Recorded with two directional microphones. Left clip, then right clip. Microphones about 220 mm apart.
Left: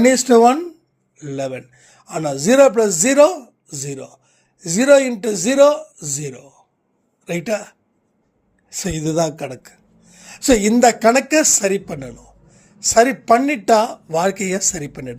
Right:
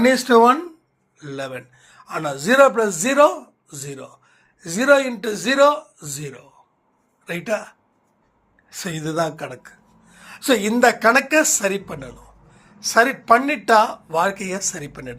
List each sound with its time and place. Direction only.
0.0 s a man's voice: 55° left (ahead or behind)